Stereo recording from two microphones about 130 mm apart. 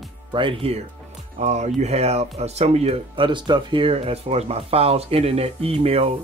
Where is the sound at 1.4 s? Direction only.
60° right (ahead or behind).